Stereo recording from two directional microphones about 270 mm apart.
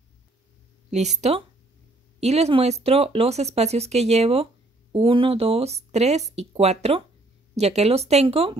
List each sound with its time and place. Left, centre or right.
0.8 s speech: right